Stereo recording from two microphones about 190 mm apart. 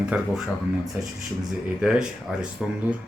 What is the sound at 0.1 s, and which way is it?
Speech, 10° right (ahead or behind).